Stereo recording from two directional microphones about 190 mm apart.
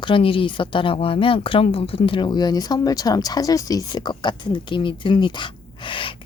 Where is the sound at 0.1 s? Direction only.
30° left (ahead or behind).